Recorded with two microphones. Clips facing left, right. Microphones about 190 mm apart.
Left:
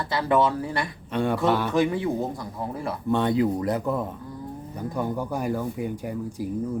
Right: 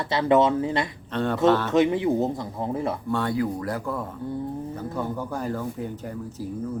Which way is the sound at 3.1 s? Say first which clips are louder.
Left 6 dB; 20° left (ahead or behind).